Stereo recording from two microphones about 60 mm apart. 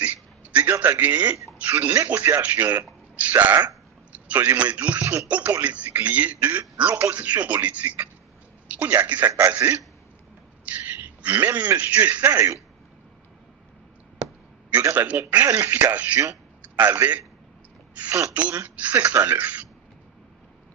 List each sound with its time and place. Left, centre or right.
0.0 s a sound: right
1.7 s a man's voice: right
10.7 s a sound: right
11.8 s speech: right
14.9 s a man's voice: right
18.3 s speech: right